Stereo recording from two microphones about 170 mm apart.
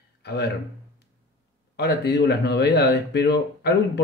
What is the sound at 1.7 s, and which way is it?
Speech, 75° left (ahead or behind).